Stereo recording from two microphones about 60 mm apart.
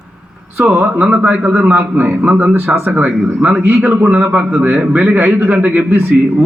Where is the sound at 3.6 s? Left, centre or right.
Right.